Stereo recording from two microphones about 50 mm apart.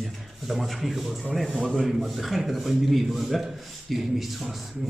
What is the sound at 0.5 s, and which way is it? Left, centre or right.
A man's voice, centre.